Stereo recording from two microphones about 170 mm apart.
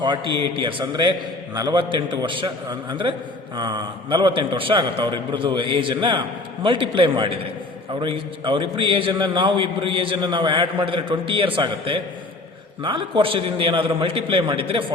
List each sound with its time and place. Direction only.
0.0 s a man's voice: 25° right (ahead or behind)